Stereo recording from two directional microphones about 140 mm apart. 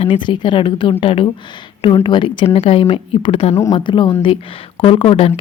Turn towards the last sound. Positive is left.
turn(degrees=40)  # may be behind; listen again after turning